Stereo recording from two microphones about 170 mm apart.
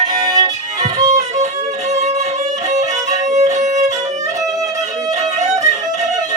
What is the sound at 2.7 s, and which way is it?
Violin, 45° right (ahead or behind).